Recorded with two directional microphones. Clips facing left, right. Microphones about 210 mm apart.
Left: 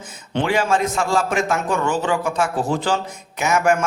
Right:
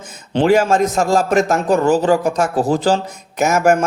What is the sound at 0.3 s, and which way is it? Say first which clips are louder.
Speech: right 6 dB; 40° right (ahead or behind).